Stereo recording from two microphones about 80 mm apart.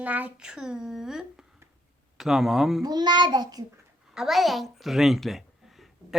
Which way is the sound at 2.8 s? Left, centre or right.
Right.